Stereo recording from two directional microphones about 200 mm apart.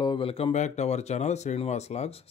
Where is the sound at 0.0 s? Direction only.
25° left (ahead or behind).